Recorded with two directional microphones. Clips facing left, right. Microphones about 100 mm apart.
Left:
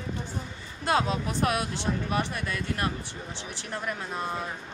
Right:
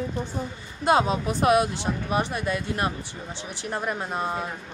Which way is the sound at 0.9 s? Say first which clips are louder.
Right 5 dB; 15° right (ahead or behind).